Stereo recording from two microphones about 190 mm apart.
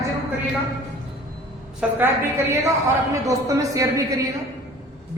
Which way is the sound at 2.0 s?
15° right (ahead or behind).